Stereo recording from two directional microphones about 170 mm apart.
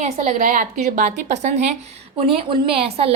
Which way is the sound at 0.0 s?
45° right (ahead or behind).